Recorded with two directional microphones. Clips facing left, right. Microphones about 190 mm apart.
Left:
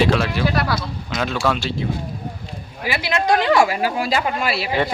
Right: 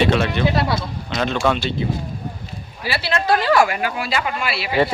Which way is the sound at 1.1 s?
5° left (ahead or behind).